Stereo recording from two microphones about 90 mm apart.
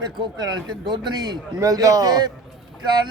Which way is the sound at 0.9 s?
50° right (ahead or behind).